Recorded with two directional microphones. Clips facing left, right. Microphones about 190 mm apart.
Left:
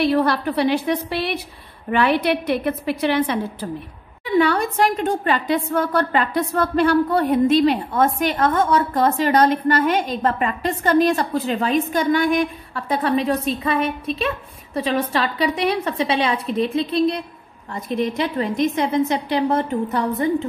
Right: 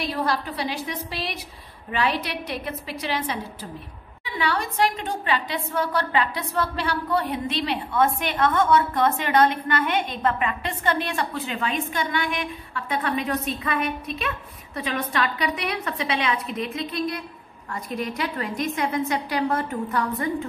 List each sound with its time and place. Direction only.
0.0 s a woman's voice: 65° left (ahead or behind)
4.4 s a woman's voice: 50° left (ahead or behind); by 20.2 s 25° left (ahead or behind)